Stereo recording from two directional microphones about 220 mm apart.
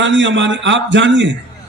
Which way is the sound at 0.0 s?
55° right (ahead or behind).